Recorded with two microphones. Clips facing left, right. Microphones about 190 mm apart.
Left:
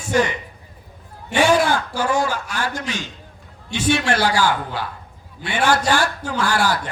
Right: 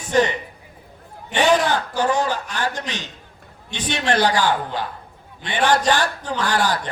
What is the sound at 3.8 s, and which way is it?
A man's voice, 10° left (ahead or behind).